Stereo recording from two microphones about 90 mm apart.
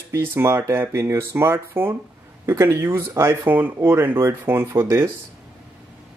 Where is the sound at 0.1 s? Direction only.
30° right (ahead or behind).